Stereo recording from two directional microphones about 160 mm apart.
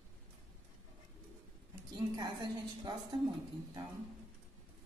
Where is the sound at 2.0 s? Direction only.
25° right (ahead or behind).